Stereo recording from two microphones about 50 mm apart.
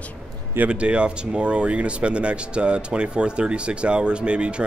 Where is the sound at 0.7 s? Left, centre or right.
Right.